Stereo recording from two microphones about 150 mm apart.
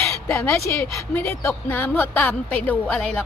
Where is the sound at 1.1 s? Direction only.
15° left (ahead or behind).